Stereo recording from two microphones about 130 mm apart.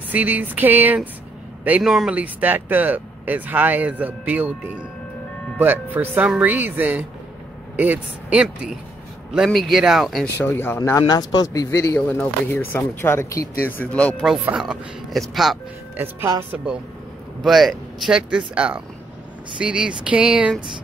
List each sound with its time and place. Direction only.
0.1 s speech: 10° right (ahead or behind)
1.8 s speech: 5° right (ahead or behind)
10.3 s speech: 15° left (ahead or behind)
14.4 s speech: 5° right (ahead or behind)
16.0 s speech: 20° right (ahead or behind)
17.4 s speech: centre (ahead or behind)